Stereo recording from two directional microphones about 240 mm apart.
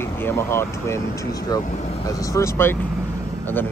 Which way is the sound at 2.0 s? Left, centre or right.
Centre.